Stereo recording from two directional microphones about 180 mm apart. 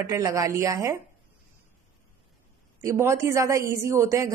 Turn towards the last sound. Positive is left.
turn(degrees=-15)  # may be behind; listen again after turning